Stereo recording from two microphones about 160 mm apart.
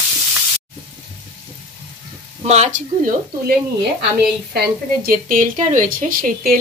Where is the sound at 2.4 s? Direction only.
45° right (ahead or behind).